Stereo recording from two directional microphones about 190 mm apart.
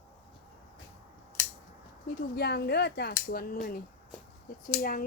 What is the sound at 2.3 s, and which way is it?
Speech, 60° left (ahead or behind).